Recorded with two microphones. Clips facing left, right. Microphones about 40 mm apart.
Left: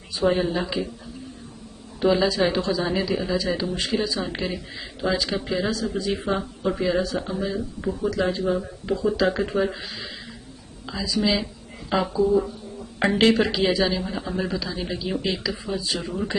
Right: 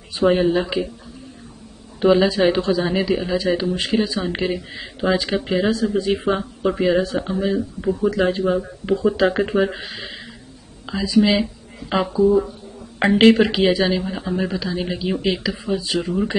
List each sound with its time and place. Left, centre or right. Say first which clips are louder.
0.1 s speech: right 5 dB; right
0.4 s speech: right 6 dB; centre
2.0 s speech: right 5 dB; right
8.2 s speech: right 4 dB; right
15.9 s speech: right 6 dB; right